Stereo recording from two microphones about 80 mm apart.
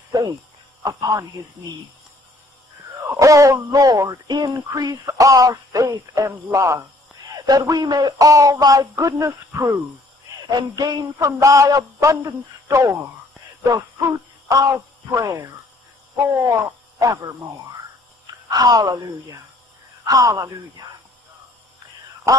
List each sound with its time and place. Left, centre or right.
3.2 s speech: right
4.3 s speech: right
7.3 s speech: right
10.5 s speech: right
18.2 s speech: right